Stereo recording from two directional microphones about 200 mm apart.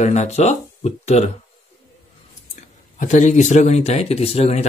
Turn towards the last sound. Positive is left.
turn(degrees=30)  # may be behind; listen again after turning